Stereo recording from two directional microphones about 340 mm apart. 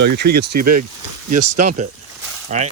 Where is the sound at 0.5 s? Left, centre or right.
Right.